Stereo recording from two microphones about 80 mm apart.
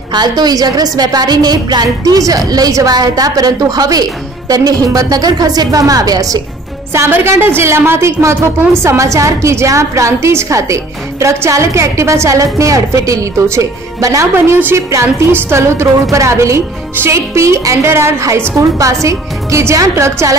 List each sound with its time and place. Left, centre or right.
0.1 s a woman's voice: right
7.2 s a woman's voice: right
14.3 s a woman's voice: right